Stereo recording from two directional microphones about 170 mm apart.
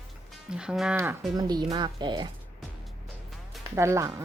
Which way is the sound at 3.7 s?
15° right (ahead or behind).